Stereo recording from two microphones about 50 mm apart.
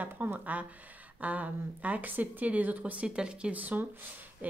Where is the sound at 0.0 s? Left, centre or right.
Right; by 3.5 s centre.